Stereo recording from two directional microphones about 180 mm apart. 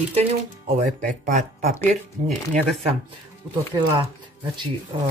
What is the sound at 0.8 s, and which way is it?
Speech, 45° right (ahead or behind).